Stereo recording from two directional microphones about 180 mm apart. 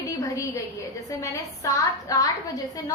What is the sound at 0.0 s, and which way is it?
A woman's voice, 15° left (ahead or behind).